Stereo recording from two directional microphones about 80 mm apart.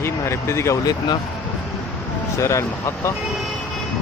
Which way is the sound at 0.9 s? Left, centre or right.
Left.